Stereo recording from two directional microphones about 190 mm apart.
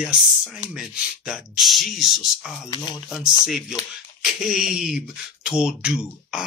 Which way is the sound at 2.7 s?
25° left (ahead or behind).